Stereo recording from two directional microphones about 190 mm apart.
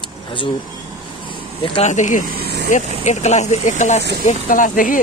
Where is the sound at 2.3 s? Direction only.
55° right (ahead or behind).